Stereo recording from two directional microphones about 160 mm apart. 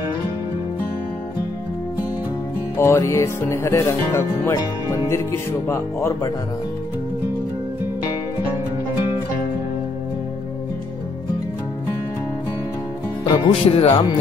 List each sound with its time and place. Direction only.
2.8 s music: 15° left (ahead or behind)
13.2 s speech: 35° left (ahead or behind)